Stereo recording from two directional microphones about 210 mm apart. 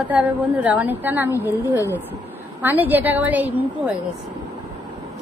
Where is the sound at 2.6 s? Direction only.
10° right (ahead or behind).